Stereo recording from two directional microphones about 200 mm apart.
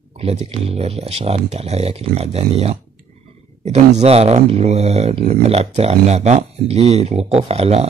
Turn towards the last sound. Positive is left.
turn(degrees=-30)  # may be behind; listen again after turning